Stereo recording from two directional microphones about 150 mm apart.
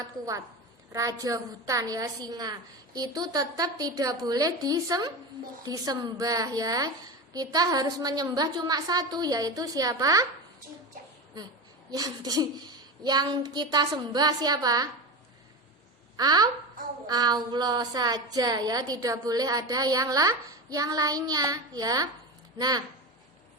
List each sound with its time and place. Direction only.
0.0 s a woman's voice: 25° right (ahead or behind)
11.9 s a woman's voice: 25° right (ahead or behind)
16.1 s a woman's voice: 25° right (ahead or behind)